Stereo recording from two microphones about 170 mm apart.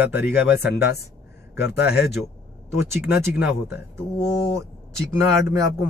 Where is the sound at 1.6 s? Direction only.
70° left (ahead or behind).